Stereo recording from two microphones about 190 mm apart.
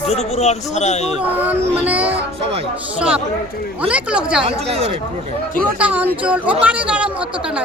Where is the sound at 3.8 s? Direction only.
5° right (ahead or behind).